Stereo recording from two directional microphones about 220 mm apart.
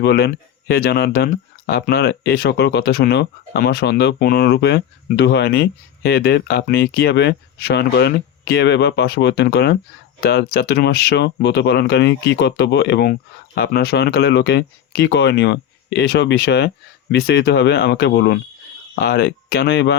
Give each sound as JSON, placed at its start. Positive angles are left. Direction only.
{"t": 0.0, "sound": "speech", "side_deg": 50}